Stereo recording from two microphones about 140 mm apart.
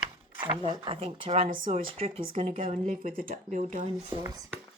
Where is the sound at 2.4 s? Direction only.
70° right (ahead or behind).